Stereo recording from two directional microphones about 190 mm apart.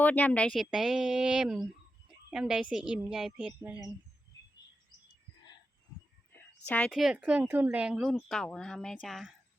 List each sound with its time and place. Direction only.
0.0 s speech: 10° left (ahead or behind)
6.7 s speech: 5° left (ahead or behind)